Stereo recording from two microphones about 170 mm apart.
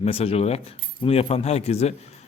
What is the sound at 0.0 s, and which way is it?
A man's voice, 35° left (ahead or behind).